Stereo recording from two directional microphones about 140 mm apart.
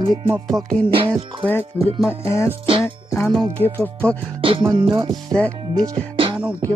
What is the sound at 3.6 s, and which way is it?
Speech, 50° right (ahead or behind).